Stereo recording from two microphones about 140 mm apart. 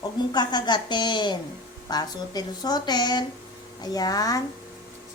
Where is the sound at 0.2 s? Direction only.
30° left (ahead or behind).